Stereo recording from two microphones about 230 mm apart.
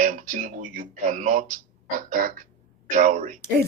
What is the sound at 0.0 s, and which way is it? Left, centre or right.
Speech, right.